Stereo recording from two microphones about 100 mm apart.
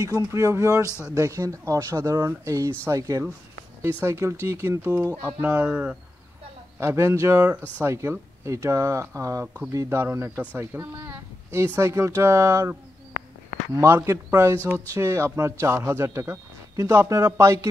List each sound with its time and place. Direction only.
0.1 s a man's voice: 35° right (ahead or behind); by 5.9 s 15° right (ahead or behind)
6.8 s a man's voice: 25° right (ahead or behind)
13.7 s a man's voice: 25° right (ahead or behind)